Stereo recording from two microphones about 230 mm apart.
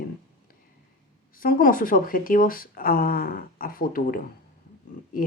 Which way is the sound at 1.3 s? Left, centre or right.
Left.